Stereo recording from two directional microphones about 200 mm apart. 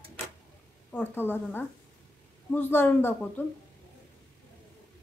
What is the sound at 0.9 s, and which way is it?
A woman's voice, 10° left (ahead or behind).